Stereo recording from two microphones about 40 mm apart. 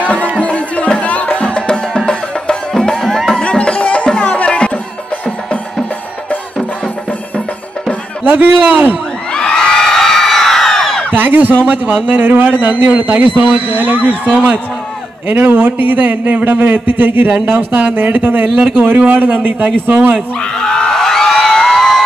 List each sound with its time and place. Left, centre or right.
0.0 s music: left; by 3.3 s centre
3.4 s music: left
8.2 s a man's voice: right
9.3 s crowd: left
11.1 s a man's voice: right
15.2 s a man's voice: right
17.3 s speech: right
17.9 s a man's voice: right
20.3 s a sound: centre